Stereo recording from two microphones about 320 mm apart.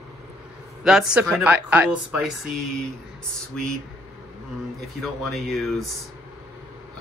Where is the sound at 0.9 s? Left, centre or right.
Centre.